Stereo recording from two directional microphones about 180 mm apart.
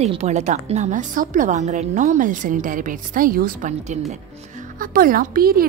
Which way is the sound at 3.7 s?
40° right (ahead or behind).